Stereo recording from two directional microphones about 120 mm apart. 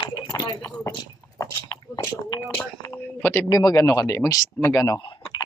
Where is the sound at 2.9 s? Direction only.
15° left (ahead or behind).